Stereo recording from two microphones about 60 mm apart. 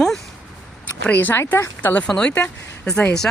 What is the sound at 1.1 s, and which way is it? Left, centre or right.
Speech, left.